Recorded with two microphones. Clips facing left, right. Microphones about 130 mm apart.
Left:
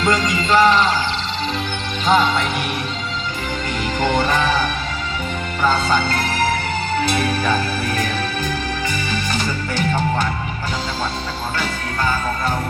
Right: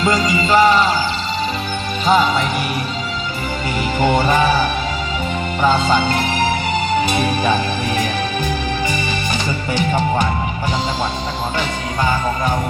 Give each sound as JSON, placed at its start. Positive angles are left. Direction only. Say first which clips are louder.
{"t": 0.0, "sound": "music", "louder": "right 2 dB", "side_deg": -5}
{"t": 2.0, "sound": "music", "louder": "right 1 dB", "side_deg": -5}
{"t": 4.0, "sound": "music", "louder": "right 3 dB", "side_deg": -10}
{"t": 5.6, "sound": "music", "louder": "right 2 dB", "side_deg": -15}
{"t": 9.3, "sound": "music", "louder": "right 2 dB", "side_deg": -15}